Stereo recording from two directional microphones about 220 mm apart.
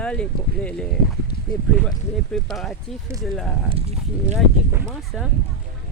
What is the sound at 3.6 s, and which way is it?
Speech, 25° right (ahead or behind).